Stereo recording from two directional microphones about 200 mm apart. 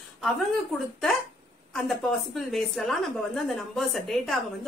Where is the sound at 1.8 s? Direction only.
Centre (ahead or behind).